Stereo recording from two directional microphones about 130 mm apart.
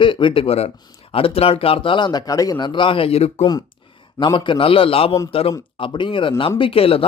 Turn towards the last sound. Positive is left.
turn(degrees=45)  # may be behind; listen again after turning